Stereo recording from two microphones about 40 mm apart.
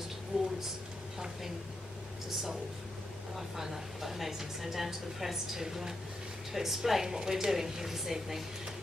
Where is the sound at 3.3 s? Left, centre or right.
Centre.